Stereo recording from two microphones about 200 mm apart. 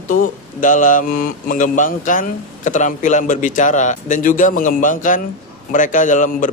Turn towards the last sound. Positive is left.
turn(degrees=40)  # may be behind; listen again after turning